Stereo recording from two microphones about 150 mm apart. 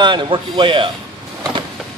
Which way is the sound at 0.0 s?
30° right (ahead or behind).